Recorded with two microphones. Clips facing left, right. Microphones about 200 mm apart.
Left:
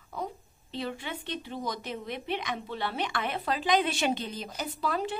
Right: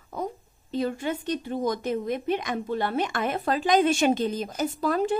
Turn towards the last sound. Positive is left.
turn(degrees=-45)  # may be behind; listen again after turning